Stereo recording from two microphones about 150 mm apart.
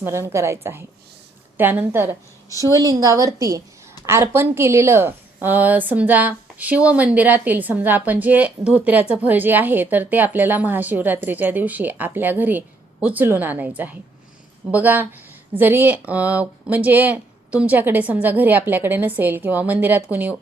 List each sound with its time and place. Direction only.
0.0 s a woman's voice: 15° right (ahead or behind)